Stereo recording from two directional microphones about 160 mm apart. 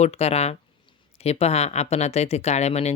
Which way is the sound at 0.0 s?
40° left (ahead or behind).